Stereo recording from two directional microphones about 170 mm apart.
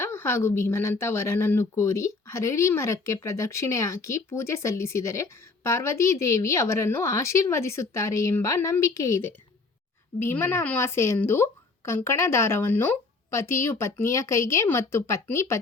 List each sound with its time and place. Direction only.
0.0 s speech: 15° left (ahead or behind)